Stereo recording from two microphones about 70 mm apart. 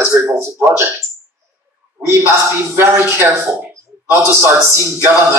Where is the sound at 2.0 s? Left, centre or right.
Right.